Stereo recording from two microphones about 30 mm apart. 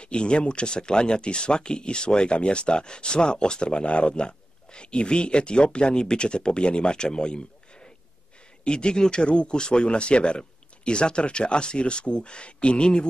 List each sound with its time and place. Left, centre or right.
0.0 s speech: left